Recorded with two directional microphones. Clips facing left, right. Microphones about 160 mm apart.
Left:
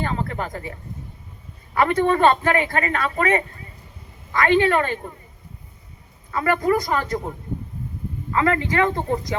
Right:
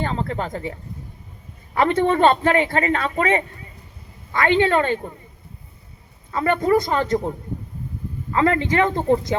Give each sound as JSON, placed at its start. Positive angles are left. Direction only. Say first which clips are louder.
{"t": 0.0, "sound": "speech", "louder": "right 1 dB", "side_deg": -30}
{"t": 6.3, "sound": "speech", "louder": "right 2 dB", "side_deg": -25}
{"t": 8.3, "sound": "speech", "louder": "right 2 dB", "side_deg": -30}